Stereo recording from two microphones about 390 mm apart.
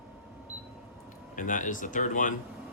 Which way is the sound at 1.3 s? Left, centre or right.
Centre.